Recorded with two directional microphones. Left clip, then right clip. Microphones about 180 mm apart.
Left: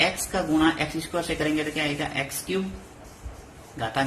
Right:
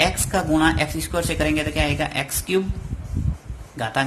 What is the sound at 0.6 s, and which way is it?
A man's voice, 45° right (ahead or behind).